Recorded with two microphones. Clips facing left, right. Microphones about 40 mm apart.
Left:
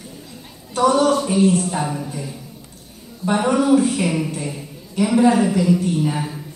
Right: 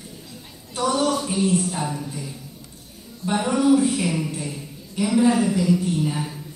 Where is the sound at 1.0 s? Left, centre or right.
Centre.